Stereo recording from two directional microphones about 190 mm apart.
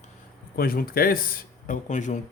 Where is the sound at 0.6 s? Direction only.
50° left (ahead or behind).